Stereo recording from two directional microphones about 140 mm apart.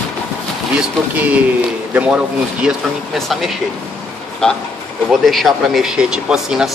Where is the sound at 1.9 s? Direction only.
10° right (ahead or behind).